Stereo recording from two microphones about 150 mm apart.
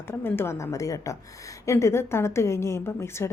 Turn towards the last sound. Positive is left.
turn(degrees=15)  # may be behind; listen again after turning